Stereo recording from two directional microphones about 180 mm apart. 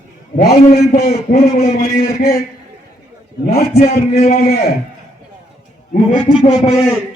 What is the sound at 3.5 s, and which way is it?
A man's voice, 60° left (ahead or behind).